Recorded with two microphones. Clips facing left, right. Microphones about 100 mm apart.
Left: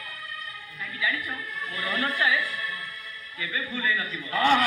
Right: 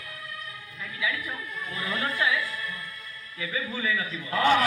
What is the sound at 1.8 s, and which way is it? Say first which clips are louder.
Speech: left 1 dB; 30° right (ahead or behind).